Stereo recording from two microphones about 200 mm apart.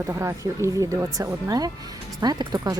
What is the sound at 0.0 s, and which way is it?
Speech, 15° right (ahead or behind).